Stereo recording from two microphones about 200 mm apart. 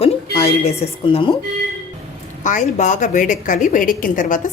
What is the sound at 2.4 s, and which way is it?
A woman's voice, 40° left (ahead or behind).